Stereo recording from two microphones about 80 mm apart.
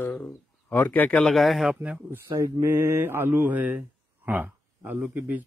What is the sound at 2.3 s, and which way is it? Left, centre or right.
Speech, right.